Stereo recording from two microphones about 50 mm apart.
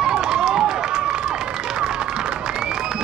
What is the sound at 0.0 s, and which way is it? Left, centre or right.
Run, centre.